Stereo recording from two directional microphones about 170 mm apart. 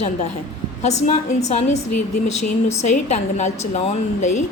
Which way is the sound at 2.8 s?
45° left (ahead or behind).